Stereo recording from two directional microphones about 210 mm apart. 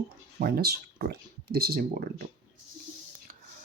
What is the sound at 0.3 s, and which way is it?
Speech, 45° right (ahead or behind).